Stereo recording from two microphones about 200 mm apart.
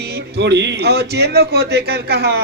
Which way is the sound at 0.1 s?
55° right (ahead or behind).